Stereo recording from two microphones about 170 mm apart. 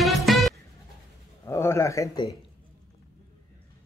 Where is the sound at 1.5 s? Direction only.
15° left (ahead or behind).